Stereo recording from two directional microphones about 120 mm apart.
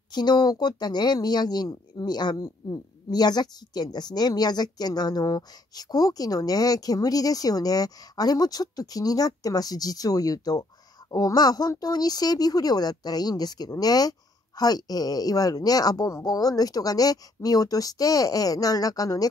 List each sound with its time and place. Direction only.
0.1 s speech: 35° left (ahead or behind)